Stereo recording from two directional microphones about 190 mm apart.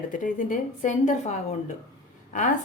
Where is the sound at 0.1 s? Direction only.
40° left (ahead or behind).